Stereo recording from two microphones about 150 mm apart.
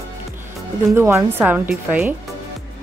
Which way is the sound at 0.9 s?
15° right (ahead or behind).